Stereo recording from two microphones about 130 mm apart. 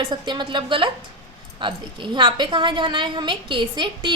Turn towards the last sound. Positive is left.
turn(degrees=-35)  # may be behind; listen again after turning